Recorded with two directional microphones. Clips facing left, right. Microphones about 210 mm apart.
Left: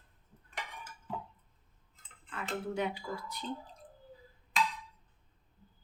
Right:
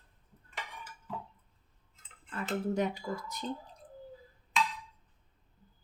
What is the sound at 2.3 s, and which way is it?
Speech, 40° right (ahead or behind).